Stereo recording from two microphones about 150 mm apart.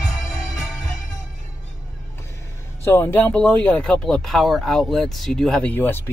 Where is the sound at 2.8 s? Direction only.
15° left (ahead or behind).